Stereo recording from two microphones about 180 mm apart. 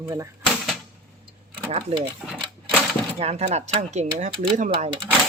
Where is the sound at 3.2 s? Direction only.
35° right (ahead or behind).